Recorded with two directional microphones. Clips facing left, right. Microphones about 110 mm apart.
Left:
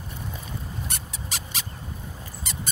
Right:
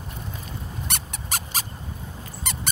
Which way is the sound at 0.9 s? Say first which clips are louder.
Right 4 dB; 75° right (ahead or behind).